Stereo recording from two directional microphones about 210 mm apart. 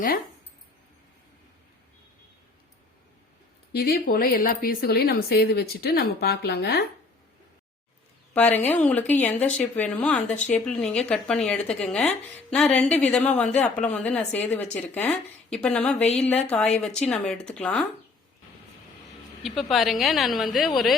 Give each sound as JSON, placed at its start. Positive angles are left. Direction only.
{"t": 3.7, "sound": "speech", "side_deg": 50}
{"t": 8.4, "sound": "speech", "side_deg": 10}
{"t": 19.7, "sound": "speech", "side_deg": 0}